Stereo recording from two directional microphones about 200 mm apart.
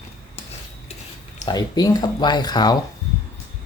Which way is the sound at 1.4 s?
20° left (ahead or behind).